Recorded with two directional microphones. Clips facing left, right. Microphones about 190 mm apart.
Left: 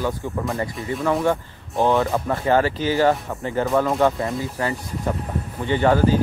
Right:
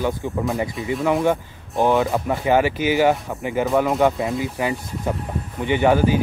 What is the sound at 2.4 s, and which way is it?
Speech, 15° right (ahead or behind).